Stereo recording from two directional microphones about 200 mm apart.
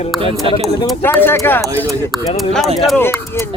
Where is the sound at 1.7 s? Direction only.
15° right (ahead or behind).